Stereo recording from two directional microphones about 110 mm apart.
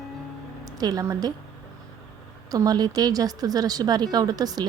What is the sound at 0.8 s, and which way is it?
Speech, 35° right (ahead or behind).